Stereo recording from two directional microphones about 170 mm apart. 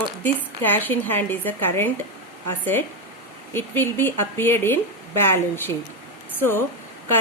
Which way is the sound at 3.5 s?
10° left (ahead or behind).